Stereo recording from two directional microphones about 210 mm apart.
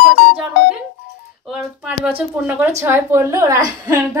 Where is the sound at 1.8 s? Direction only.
5° right (ahead or behind).